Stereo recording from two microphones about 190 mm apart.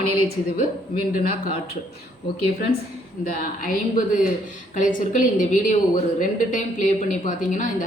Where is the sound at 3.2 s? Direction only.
45° left (ahead or behind).